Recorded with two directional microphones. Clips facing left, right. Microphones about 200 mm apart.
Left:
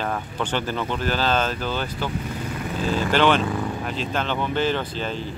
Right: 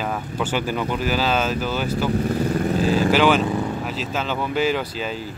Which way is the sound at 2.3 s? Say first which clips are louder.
Right 9 dB; 40° right (ahead or behind).